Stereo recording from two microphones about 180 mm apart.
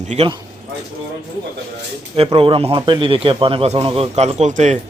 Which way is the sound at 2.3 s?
30° right (ahead or behind).